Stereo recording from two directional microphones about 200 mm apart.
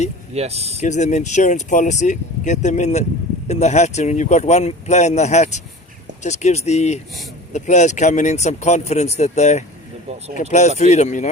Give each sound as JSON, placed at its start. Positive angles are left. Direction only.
{"t": 0.3, "sound": "speech", "side_deg": -30}
{"t": 0.8, "sound": "speech", "side_deg": 35}
{"t": 10.1, "sound": "speech", "side_deg": -30}
{"t": 10.5, "sound": "speech", "side_deg": 35}